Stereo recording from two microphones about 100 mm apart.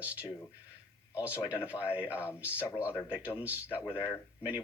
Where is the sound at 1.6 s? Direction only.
25° left (ahead or behind).